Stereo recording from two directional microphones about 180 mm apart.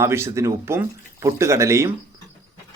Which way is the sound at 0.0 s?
15° right (ahead or behind).